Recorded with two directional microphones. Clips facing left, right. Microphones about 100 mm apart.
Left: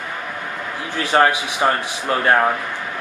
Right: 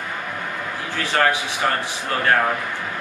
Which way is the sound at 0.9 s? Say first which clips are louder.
Left 4 dB; 20° left (ahead or behind).